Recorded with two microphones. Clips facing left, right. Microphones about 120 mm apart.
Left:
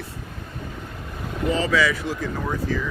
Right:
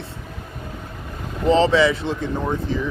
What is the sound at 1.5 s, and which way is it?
Speech, 30° right (ahead or behind).